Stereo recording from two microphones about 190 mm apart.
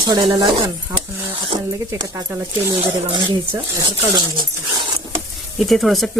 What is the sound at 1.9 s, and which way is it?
Speech, 15° right (ahead or behind).